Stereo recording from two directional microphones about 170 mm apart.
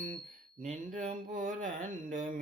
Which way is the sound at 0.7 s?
45° right (ahead or behind).